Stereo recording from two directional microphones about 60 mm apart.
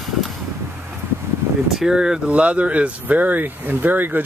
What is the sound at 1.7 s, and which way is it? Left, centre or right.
Speech, centre.